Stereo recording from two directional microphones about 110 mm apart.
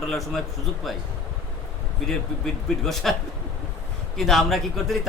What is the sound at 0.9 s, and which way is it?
Speech, centre (ahead or behind).